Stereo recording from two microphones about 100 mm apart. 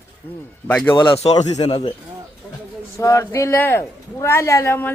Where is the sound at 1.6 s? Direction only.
70° left (ahead or behind).